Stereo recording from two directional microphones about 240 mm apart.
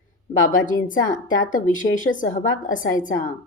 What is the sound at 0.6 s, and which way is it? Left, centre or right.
A woman's voice, left.